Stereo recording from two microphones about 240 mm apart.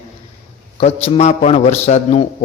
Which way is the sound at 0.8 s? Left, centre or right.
Left.